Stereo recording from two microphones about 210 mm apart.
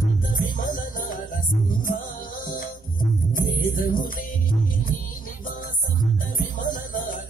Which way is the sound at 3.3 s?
40° left (ahead or behind).